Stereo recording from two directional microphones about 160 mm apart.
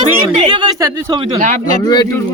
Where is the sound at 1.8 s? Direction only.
25° left (ahead or behind).